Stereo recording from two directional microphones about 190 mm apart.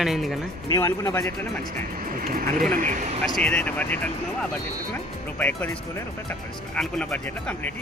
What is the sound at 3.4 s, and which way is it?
Speech, 5° left (ahead or behind).